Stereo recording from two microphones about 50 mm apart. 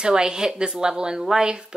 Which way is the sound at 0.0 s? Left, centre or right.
Centre.